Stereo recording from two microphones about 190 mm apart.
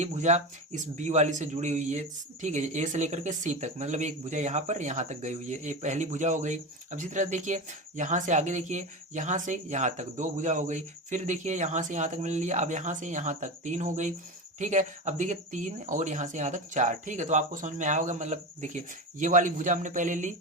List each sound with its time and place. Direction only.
0.0 s a man's voice: 40° right (ahead or behind)